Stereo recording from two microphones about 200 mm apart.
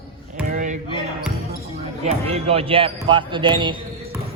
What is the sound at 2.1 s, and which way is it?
Speech, 30° right (ahead or behind).